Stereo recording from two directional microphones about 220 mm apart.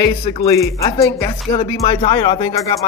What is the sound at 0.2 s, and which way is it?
Speech, 25° left (ahead or behind).